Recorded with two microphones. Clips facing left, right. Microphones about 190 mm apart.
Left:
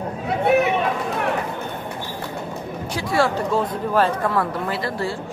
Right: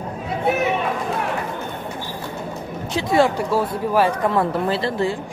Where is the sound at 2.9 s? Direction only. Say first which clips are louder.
Right 3 dB; 20° right (ahead or behind).